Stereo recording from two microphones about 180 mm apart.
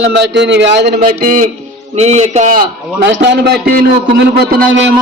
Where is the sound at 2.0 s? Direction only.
35° right (ahead or behind).